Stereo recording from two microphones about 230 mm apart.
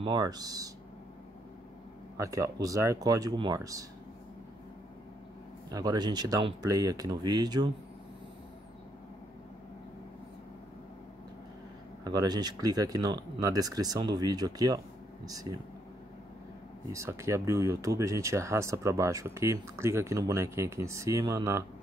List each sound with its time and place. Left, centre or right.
0.0 s speech: centre
2.1 s speech: centre
5.7 s speech: centre
12.0 s speech: centre
16.9 s speech: centre